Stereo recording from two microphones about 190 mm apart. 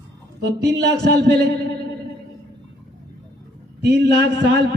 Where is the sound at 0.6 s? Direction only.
60° right (ahead or behind).